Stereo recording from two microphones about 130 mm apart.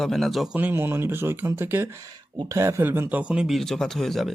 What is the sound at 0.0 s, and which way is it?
A man's voice, centre (ahead or behind).